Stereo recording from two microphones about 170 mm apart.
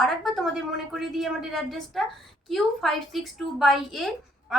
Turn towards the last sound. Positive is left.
turn(degrees=0)  # may be behind; listen again after turning